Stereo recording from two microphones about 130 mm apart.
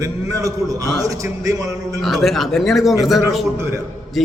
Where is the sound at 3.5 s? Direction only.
20° right (ahead or behind).